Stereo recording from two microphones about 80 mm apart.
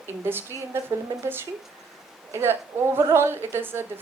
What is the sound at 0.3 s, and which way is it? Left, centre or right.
A woman's voice, right.